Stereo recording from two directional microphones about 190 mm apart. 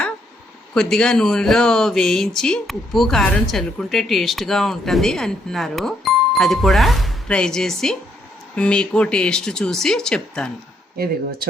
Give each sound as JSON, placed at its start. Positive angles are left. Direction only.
{"t": 0.7, "sound": "speech", "side_deg": 5}
{"t": 10.9, "sound": "speech", "side_deg": -50}